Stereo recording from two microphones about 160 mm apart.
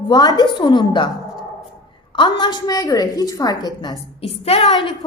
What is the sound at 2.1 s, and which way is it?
A woman's voice, 30° left (ahead or behind).